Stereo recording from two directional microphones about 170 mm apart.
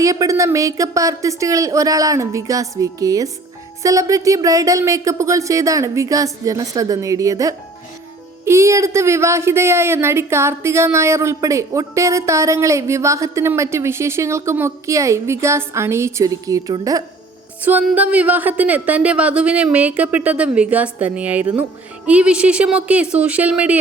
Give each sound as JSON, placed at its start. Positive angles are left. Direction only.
{"t": 0.0, "sound": "a woman's voice", "side_deg": -20}
{"t": 17.6, "sound": "a woman's voice", "side_deg": -10}